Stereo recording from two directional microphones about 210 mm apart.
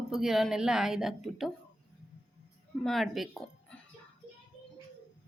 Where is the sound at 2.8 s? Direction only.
Centre (ahead or behind).